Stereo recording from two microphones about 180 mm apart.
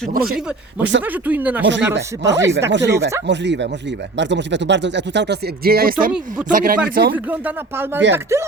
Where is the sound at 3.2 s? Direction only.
75° right (ahead or behind); by 7.1 s 55° right (ahead or behind).